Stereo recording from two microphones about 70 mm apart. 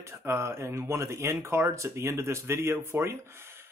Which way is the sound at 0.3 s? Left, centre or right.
Right.